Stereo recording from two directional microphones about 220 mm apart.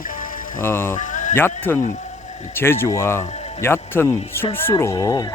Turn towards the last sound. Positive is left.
turn(degrees=15)  # may be behind; listen again after turning